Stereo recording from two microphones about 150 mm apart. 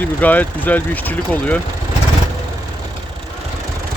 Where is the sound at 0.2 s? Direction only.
10° left (ahead or behind).